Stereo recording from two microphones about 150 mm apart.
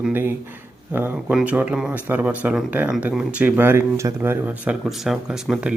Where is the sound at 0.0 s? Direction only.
15° right (ahead or behind).